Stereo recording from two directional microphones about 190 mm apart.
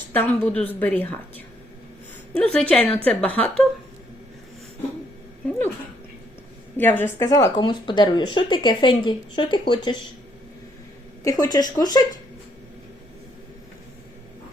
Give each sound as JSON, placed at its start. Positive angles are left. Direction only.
{"t": 0.1, "sound": "a woman's voice", "side_deg": 10}
{"t": 2.4, "sound": "a woman's voice", "side_deg": 5}
{"t": 6.7, "sound": "speech", "side_deg": 10}
{"t": 11.2, "sound": "speech", "side_deg": 20}